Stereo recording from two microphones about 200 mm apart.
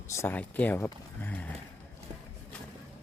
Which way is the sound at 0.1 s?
10° left (ahead or behind).